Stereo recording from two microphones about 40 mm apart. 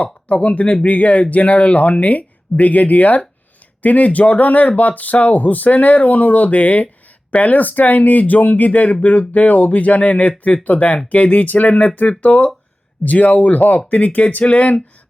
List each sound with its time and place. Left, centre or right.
0.0 s speech: left